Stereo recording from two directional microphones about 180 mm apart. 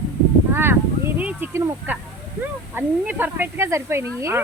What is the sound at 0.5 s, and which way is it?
Speech, 15° right (ahead or behind).